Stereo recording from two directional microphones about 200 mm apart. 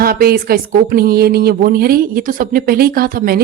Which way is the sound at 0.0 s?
50° right (ahead or behind).